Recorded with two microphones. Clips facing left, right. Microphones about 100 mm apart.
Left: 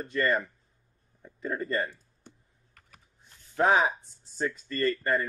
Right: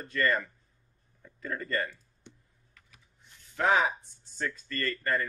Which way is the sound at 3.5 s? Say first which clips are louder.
Left 2 dB; 30° left (ahead or behind).